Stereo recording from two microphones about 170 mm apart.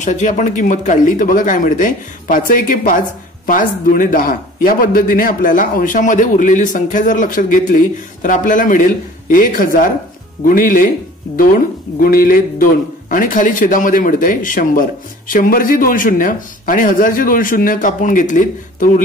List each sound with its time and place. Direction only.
0.0 s a man's voice: 45° left (ahead or behind)
12.0 s a sound: 55° left (ahead or behind)
13.1 s a man's voice: 50° left (ahead or behind)